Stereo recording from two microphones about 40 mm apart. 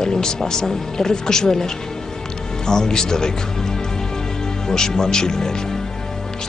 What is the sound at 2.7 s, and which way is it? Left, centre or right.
Speech, centre.